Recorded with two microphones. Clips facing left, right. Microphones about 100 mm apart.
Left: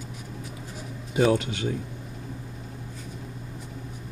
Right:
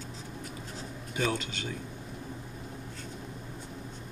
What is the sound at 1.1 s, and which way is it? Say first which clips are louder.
Speech: left 10 dB; 40° left (ahead or behind).